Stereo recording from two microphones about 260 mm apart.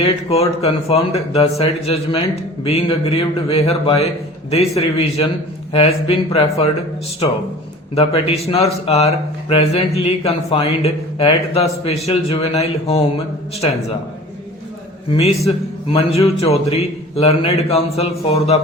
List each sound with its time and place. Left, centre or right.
0.0 s speech: left
7.9 s speech: left
15.1 s speech: left